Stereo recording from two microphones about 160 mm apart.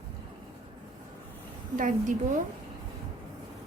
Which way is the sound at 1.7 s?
55° right (ahead or behind).